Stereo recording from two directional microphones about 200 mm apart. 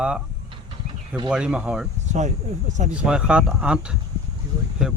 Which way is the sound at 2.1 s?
35° right (ahead or behind).